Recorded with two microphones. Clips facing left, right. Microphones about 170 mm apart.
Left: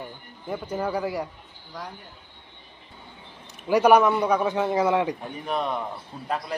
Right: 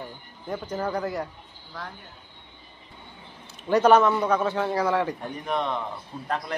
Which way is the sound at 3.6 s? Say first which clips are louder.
Left 1 dB; 10° left (ahead or behind).